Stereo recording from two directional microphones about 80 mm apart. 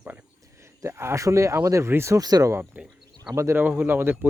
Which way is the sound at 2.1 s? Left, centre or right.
Right.